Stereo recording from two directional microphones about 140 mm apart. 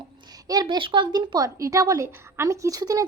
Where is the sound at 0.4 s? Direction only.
25° right (ahead or behind).